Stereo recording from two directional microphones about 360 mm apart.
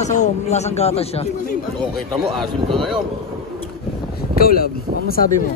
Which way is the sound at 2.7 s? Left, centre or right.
Centre.